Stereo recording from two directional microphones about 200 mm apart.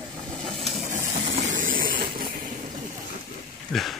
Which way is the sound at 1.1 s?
35° right (ahead or behind).